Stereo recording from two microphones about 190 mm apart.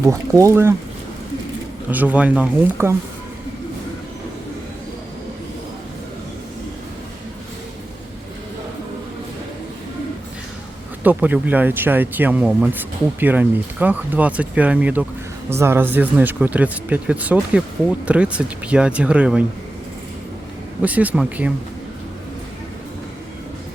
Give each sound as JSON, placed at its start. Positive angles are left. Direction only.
{"t": 0.0, "sound": "speech", "side_deg": -15}
{"t": 1.9, "sound": "speech", "side_deg": -10}
{"t": 11.0, "sound": "speech", "side_deg": -10}
{"t": 20.8, "sound": "speech", "side_deg": -10}